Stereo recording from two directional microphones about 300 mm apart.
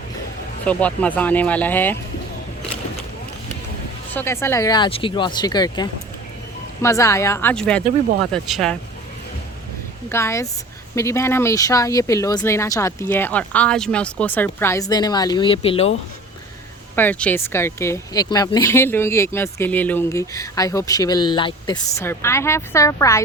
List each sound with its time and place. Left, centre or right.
0.6 s speech: centre
4.1 s speech: centre
10.1 s speech: centre
16.9 s speech: centre